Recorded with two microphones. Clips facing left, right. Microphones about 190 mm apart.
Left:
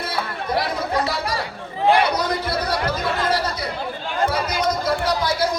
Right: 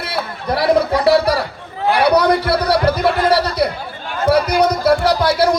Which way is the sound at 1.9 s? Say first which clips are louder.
Right 6 dB; 65° right (ahead or behind).